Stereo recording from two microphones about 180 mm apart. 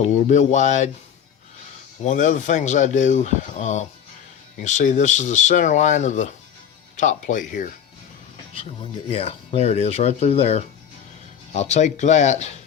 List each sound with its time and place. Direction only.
0.0 s speech: 40° left (ahead or behind)
2.0 s speech: 45° left (ahead or behind)
8.5 s speech: 30° left (ahead or behind)